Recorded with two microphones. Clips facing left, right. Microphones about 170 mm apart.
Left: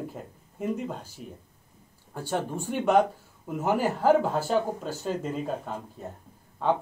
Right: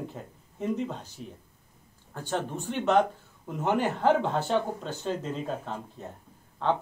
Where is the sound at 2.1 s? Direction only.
10° left (ahead or behind).